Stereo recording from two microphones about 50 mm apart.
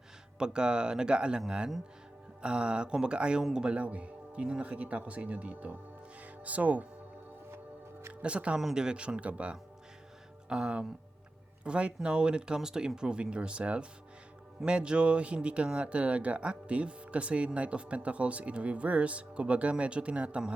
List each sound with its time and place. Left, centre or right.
0.3 s speech: centre
8.2 s speech: right